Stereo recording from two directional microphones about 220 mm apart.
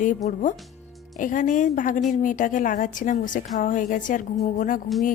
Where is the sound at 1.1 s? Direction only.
35° left (ahead or behind).